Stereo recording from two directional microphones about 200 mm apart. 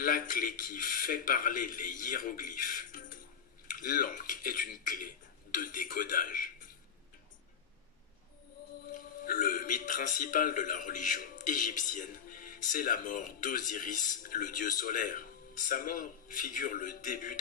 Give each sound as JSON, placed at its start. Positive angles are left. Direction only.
{"t": 0.0, "sound": "a man's voice", "side_deg": 45}
{"t": 8.9, "sound": "a man's voice", "side_deg": 45}